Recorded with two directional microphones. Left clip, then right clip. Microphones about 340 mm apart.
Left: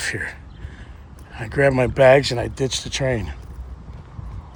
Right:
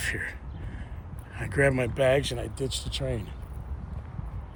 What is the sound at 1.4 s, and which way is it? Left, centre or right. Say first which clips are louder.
Speech: left 7 dB; centre.